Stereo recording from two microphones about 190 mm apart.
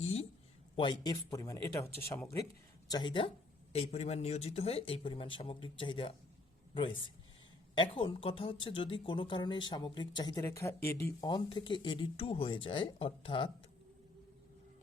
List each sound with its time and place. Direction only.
0.8 s speech: 25° left (ahead or behind)
7.8 s speech: 30° left (ahead or behind)